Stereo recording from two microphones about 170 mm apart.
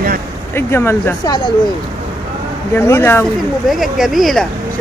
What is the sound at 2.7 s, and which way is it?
Speech, 15° left (ahead or behind).